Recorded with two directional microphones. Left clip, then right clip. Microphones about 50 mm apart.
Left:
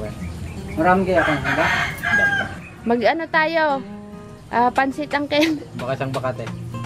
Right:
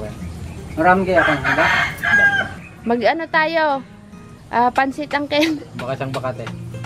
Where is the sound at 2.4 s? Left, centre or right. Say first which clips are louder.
Right 1 dB; centre.